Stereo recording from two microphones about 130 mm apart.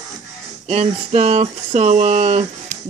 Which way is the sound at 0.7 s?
55° right (ahead or behind).